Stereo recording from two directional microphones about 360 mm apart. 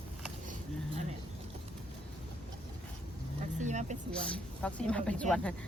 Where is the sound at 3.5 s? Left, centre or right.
Centre.